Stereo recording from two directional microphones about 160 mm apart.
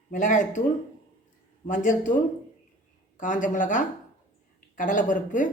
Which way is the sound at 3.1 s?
55° left (ahead or behind).